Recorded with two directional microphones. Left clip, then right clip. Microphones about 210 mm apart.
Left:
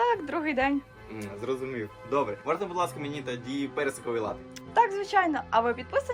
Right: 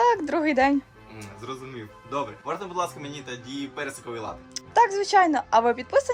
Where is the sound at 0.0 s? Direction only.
30° right (ahead or behind).